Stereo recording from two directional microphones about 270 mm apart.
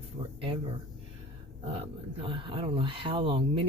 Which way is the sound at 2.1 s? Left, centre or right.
Centre.